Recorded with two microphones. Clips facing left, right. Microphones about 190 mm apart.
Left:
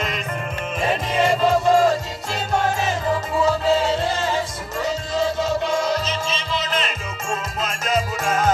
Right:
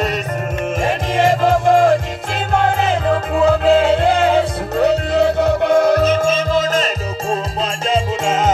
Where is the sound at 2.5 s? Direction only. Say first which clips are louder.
Right 6 dB; 60° right (ahead or behind); by 6.8 s 45° right (ahead or behind).